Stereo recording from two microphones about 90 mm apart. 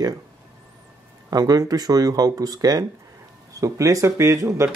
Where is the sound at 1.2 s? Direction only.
45° right (ahead or behind).